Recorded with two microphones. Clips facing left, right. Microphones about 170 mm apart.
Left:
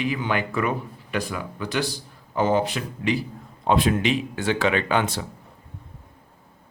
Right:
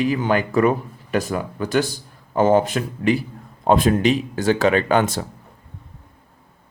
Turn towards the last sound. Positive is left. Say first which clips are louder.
# right 5 dB
turn(degrees=-45)  # may be behind; listen again after turning